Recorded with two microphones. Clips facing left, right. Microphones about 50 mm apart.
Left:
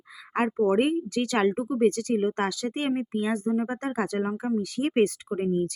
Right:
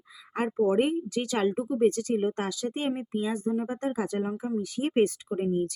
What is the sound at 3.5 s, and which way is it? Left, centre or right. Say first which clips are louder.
Speech: left 2 dB; left.